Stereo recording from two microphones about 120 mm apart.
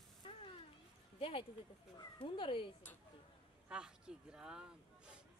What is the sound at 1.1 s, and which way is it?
Speech, 50° left (ahead or behind).